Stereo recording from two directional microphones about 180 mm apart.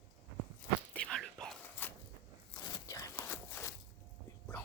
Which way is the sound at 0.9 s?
5° left (ahead or behind).